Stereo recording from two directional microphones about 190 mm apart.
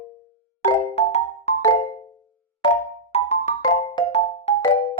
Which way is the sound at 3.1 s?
35° left (ahead or behind).